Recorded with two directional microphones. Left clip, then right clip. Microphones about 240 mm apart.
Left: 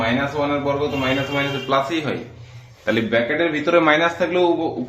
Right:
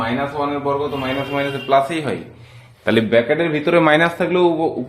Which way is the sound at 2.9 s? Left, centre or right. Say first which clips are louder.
Right 4 dB; right.